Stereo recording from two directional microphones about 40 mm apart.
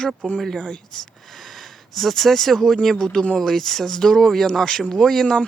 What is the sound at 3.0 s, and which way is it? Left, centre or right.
Speech, centre.